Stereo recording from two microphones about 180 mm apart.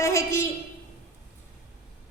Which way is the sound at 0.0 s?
15° left (ahead or behind).